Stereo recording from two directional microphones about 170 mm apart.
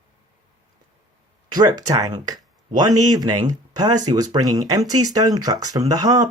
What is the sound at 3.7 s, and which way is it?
Speech, 25° right (ahead or behind).